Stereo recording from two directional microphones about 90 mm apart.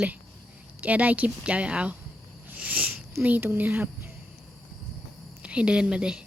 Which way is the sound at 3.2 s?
20° right (ahead or behind).